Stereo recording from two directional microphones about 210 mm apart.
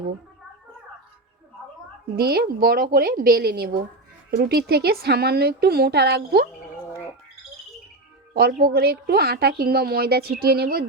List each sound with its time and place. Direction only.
2.1 s a woman's voice: 50° right (ahead or behind)
8.3 s a woman's voice: 45° right (ahead or behind)